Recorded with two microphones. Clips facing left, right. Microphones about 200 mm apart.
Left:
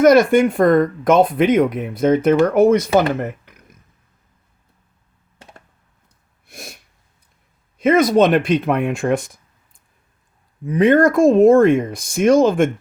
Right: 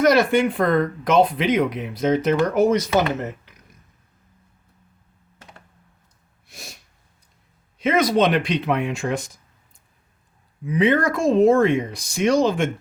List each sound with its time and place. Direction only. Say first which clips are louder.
0.0 s speech: left 5 dB; 50° left (ahead or behind)
6.5 s sneeze: left 5 dB; 55° left (ahead or behind)
7.8 s speech: left 5 dB; 50° left (ahead or behind)